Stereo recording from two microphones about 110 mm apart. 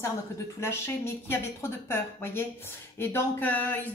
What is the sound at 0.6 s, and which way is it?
Speech, 25° left (ahead or behind).